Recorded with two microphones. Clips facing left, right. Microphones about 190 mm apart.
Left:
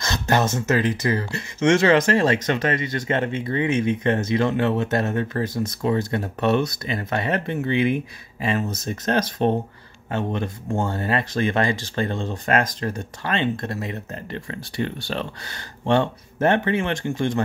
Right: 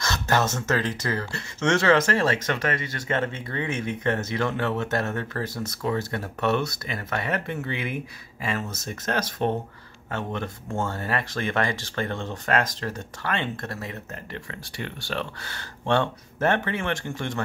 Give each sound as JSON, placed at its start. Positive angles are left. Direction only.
{"t": 0.0, "sound": "speech", "side_deg": 15}